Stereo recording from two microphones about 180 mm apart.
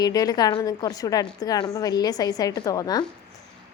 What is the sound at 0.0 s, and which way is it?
A woman's voice, 20° left (ahead or behind).